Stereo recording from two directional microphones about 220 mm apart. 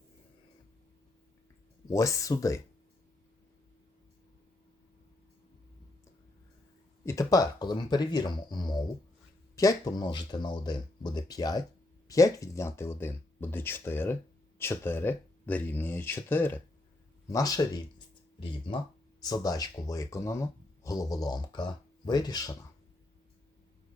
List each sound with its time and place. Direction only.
1.9 s speech: 15° left (ahead or behind)
7.0 s speech: 15° left (ahead or behind)
19.2 s speech: 15° left (ahead or behind)